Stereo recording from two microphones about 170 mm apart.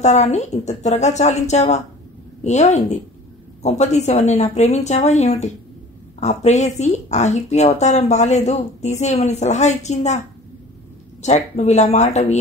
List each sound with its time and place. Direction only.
0.0 s a woman's voice: 40° left (ahead or behind)
11.2 s speech: 40° left (ahead or behind)